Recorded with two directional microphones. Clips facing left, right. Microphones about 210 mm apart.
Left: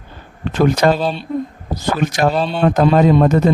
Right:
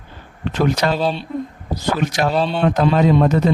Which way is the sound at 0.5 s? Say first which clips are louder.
Left 5 dB; 50° left (ahead or behind).